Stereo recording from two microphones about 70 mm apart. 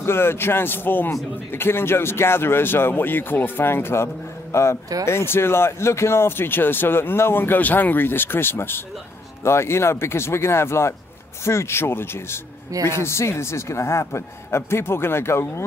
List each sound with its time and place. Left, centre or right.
0.0 s speech: left